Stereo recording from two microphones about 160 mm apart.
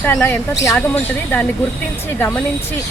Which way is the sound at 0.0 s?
15° left (ahead or behind).